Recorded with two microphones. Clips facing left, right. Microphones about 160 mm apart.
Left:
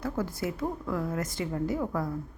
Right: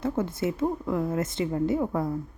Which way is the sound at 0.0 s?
25° right (ahead or behind).